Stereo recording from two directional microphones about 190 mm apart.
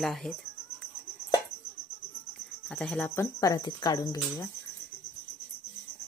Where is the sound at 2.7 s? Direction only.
5° left (ahead or behind); by 4.4 s 20° left (ahead or behind).